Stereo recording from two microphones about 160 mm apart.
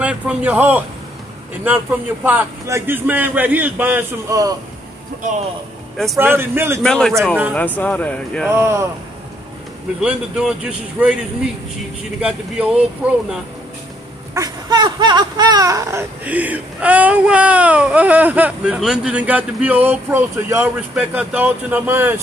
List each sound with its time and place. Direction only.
0.0 s speech: 10° right (ahead or behind)
6.1 s speech: 15° right (ahead or behind)
6.8 s speech: 5° left (ahead or behind)
8.5 s speech: 15° right (ahead or behind)
9.9 s speech: 5° right (ahead or behind)
12.2 s speech: 5° right (ahead or behind)
14.3 s speech: 25° right (ahead or behind)